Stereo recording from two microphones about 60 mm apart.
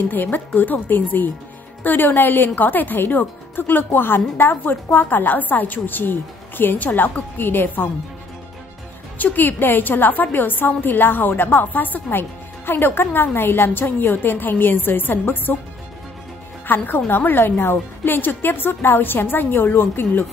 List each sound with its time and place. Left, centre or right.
0.1 s a woman's voice: left
9.2 s a woman's voice: left
16.6 s a woman's voice: left